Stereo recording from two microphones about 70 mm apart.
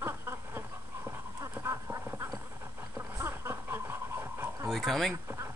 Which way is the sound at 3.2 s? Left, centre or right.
Right.